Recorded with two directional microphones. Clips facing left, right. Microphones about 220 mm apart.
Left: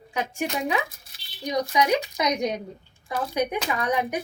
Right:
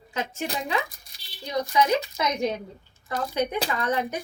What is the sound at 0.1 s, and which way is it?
Speech, 15° left (ahead or behind).